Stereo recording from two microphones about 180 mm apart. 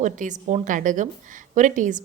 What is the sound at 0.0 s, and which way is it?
Speech, 45° right (ahead or behind).